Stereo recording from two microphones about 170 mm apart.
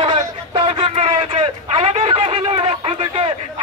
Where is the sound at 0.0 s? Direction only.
35° right (ahead or behind).